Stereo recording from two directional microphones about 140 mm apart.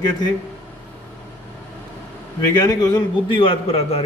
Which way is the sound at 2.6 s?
30° left (ahead or behind).